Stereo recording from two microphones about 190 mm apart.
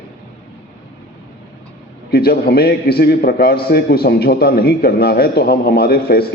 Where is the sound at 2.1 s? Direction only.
55° left (ahead or behind).